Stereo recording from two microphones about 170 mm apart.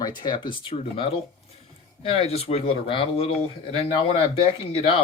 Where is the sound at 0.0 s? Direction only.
25° left (ahead or behind).